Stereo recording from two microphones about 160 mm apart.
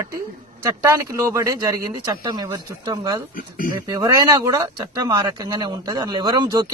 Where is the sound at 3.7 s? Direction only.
25° right (ahead or behind).